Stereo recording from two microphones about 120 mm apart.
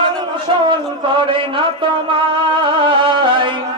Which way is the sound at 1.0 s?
45° right (ahead or behind).